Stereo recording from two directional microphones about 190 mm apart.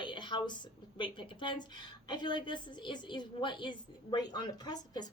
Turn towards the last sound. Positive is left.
turn(degrees=20)  # may be behind; listen again after turning